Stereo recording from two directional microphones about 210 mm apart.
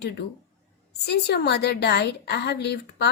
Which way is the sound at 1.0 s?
50° left (ahead or behind).